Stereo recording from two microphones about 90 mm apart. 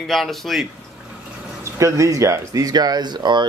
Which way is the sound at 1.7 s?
35° right (ahead or behind).